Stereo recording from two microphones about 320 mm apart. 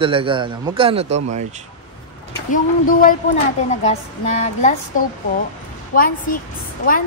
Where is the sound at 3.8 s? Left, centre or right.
Centre.